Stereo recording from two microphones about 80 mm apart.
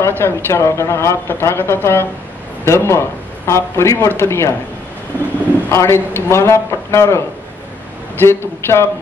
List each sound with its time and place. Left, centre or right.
0.0 s speech: left
5.7 s a man's voice: left